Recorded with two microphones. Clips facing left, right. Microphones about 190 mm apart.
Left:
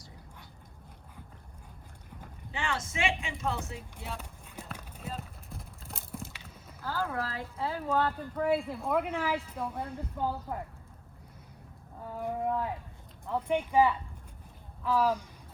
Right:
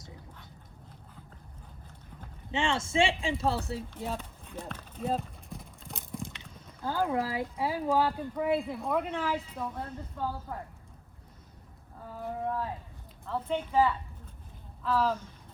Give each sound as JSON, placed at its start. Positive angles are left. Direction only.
{"t": 2.5, "sound": "speech", "side_deg": -25}
{"t": 4.2, "sound": "run", "side_deg": 10}
{"t": 5.2, "sound": "clip-clop", "side_deg": 0}
{"t": 6.8, "sound": "speech", "side_deg": -20}
{"t": 12.2, "sound": "a sound", "side_deg": 20}
{"t": 13.2, "sound": "speech", "side_deg": 15}